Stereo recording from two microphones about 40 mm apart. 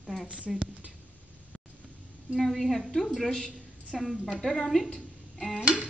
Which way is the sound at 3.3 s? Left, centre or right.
Centre.